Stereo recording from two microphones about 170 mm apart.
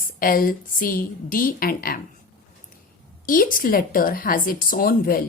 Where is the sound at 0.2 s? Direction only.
55° left (ahead or behind).